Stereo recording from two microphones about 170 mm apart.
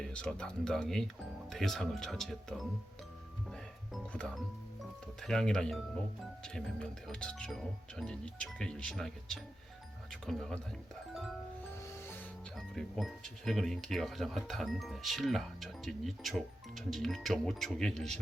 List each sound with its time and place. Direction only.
0.0 s speech: 5° left (ahead or behind)
3.5 s music: 5° left (ahead or behind)
4.8 s speech: centre (ahead or behind)
11.1 s music: centre (ahead or behind)
11.8 s music: 15° left (ahead or behind)
12.5 s speech: centre (ahead or behind)